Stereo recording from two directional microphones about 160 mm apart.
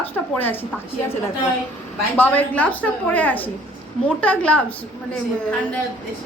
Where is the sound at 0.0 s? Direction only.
10° left (ahead or behind).